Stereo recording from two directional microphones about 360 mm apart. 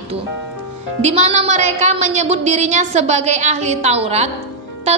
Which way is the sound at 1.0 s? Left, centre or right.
Centre.